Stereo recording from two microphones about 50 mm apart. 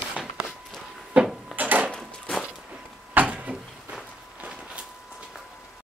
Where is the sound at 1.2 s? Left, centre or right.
Right.